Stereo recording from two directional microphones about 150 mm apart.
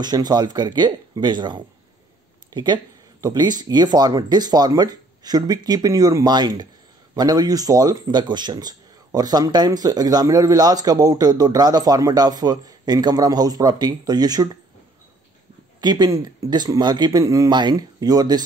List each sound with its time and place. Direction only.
0.0 s speech: 25° right (ahead or behind)
15.8 s speech: 25° right (ahead or behind)